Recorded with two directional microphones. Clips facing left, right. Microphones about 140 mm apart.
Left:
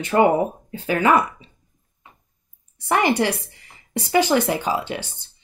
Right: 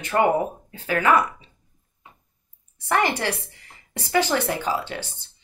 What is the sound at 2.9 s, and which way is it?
Speech, 15° left (ahead or behind).